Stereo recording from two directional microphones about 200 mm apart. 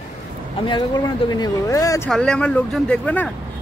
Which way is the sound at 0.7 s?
20° left (ahead or behind).